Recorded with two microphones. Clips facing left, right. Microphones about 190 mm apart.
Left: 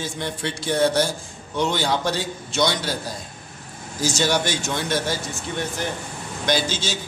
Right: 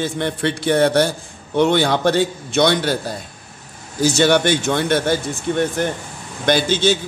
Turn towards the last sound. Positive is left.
turn(degrees=-60)  # may be behind; listen again after turning